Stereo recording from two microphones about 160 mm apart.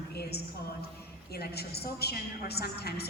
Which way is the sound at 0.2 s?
85° left.